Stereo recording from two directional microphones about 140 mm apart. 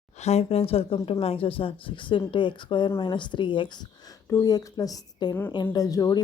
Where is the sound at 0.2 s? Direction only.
50° left (ahead or behind).